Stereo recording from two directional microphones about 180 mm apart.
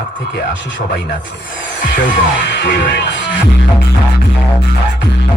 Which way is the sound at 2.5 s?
90° left.